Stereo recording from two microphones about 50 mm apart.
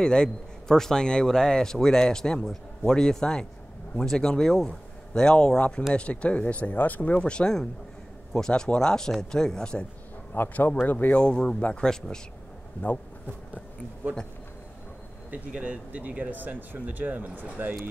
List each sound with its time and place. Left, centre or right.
0.0 s speech: centre
10.3 s speech: left
11.1 s speech: centre
15.3 s speech: right